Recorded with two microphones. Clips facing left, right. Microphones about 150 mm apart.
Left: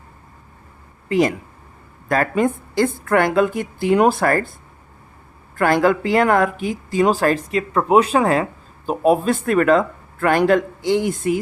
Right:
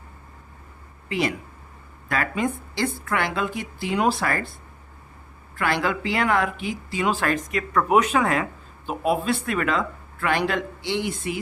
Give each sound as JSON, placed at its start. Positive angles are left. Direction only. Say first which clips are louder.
{"t": 1.0, "sound": "a woman's voice", "louder": "left 8 dB", "side_deg": 45}
{"t": 5.5, "sound": "a woman's voice", "louder": "left 8 dB", "side_deg": 45}